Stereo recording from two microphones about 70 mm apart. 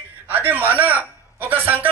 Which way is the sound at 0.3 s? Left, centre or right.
Right.